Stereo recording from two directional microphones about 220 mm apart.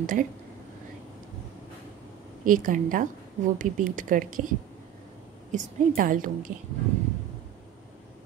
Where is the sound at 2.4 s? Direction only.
40° right (ahead or behind).